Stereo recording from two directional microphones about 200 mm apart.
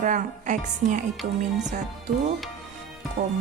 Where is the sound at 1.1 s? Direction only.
Centre (ahead or behind).